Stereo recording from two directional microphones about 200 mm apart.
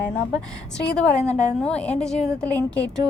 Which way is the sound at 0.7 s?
5° left (ahead or behind).